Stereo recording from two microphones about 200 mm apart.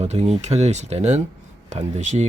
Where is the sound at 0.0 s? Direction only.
35° right (ahead or behind).